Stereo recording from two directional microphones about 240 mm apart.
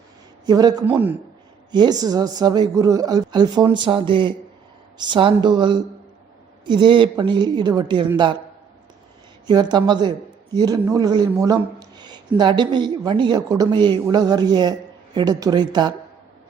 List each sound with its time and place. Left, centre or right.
0.4 s a man's voice: centre
9.5 s a man's voice: centre